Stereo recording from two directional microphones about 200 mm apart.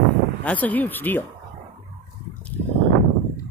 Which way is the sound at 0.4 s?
5° left (ahead or behind).